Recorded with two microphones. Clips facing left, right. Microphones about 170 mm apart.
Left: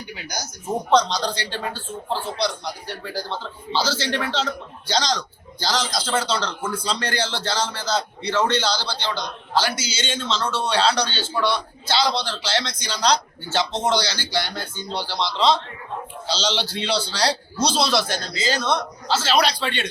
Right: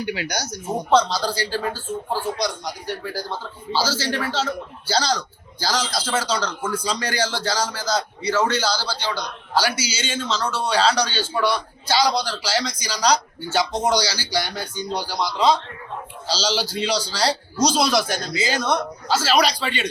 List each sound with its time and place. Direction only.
0.0 s speech: 75° right (ahead or behind)
0.9 s a man's voice: 5° right (ahead or behind)